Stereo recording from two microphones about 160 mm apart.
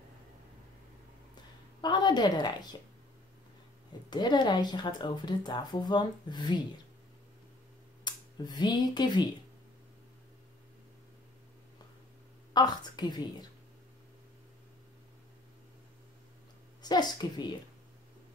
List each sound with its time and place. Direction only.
1.8 s a woman's voice: 30° left (ahead or behind)
4.1 s speech: 25° left (ahead or behind)
8.0 s speech: 25° left (ahead or behind)
12.5 s speech: 25° left (ahead or behind)
16.8 s speech: 25° left (ahead or behind)